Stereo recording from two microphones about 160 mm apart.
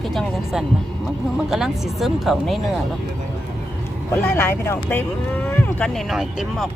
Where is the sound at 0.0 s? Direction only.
Centre (ahead or behind).